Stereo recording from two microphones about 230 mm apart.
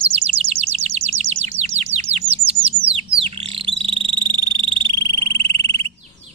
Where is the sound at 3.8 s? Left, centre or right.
Right.